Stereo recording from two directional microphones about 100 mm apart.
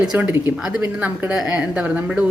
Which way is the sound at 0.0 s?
10° right (ahead or behind).